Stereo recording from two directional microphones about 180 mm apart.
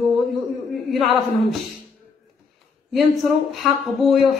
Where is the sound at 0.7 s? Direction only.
Centre (ahead or behind).